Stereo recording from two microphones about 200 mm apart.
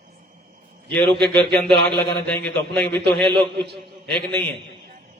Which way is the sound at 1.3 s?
10° left (ahead or behind).